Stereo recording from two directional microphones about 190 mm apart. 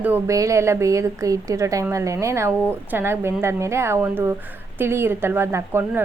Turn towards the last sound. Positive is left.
turn(degrees=-10)  # may be behind; listen again after turning